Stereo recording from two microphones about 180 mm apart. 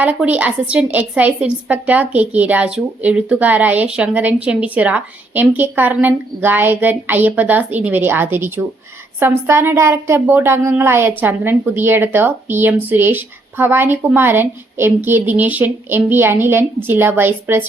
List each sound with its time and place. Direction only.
0.0 s a woman's voice: 10° right (ahead or behind)